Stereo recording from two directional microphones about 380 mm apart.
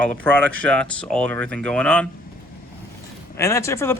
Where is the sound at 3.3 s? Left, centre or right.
Centre.